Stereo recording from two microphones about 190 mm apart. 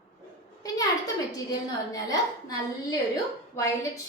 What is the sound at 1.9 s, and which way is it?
A woman's voice, 20° left (ahead or behind).